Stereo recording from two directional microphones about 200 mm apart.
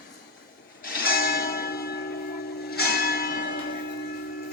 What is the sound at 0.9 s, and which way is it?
Church bell, 50° left (ahead or behind).